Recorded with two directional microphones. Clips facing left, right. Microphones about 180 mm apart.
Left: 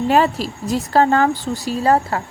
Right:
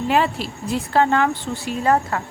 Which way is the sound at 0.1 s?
40° left (ahead or behind).